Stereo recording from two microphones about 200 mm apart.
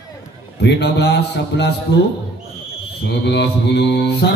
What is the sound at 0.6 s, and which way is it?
A man's voice, 60° left (ahead or behind).